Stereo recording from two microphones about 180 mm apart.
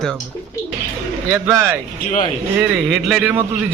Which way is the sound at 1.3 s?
15° right (ahead or behind).